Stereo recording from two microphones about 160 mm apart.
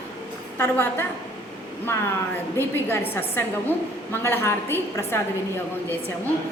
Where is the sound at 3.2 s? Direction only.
15° left (ahead or behind).